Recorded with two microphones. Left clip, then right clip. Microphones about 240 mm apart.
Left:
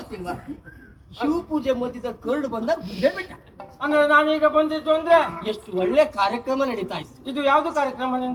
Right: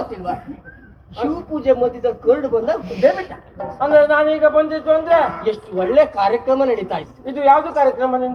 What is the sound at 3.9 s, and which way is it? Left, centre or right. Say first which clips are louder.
A man's voice: right 5 dB; left.